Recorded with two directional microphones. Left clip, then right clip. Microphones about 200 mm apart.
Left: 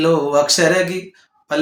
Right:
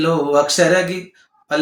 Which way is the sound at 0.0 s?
15° left (ahead or behind).